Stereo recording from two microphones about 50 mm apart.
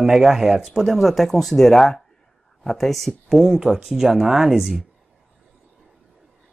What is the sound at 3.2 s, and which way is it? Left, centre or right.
Speech, centre.